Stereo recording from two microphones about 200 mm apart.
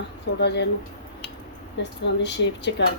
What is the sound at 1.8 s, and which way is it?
A woman's voice, 60° left (ahead or behind).